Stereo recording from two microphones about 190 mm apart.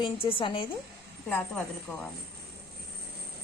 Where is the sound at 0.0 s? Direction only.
25° left (ahead or behind).